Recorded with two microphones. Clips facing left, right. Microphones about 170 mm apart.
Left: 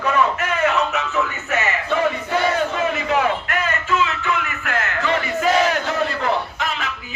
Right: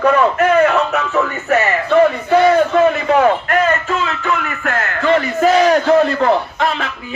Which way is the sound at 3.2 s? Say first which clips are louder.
Right 8 dB; 50° right (ahead or behind).